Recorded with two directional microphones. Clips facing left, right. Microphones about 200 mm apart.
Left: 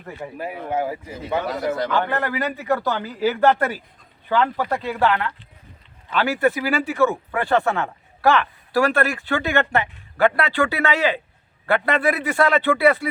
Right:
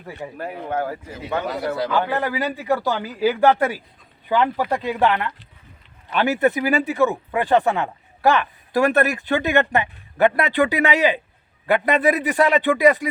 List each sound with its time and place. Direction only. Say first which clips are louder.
0.3 s speech: left 1 dB; 10° left (ahead or behind); by 13.1 s 15° right (ahead or behind)